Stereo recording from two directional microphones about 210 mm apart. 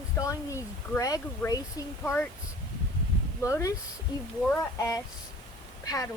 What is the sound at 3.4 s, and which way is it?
Speech, 15° left (ahead or behind).